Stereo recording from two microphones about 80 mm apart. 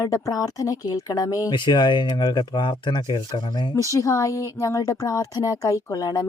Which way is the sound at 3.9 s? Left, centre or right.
Left.